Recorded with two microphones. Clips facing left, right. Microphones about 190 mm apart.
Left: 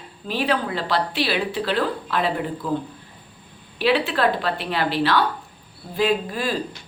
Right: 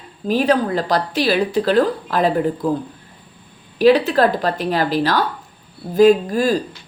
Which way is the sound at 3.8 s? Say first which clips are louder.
Right 7 dB; 40° right (ahead or behind).